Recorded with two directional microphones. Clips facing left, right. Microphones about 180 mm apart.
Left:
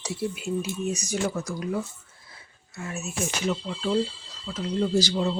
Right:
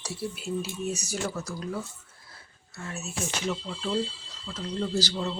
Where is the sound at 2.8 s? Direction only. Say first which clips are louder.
Left 4 dB; 10° left (ahead or behind).